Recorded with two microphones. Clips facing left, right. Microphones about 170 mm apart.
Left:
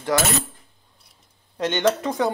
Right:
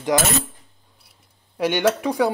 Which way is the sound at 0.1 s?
20° right (ahead or behind).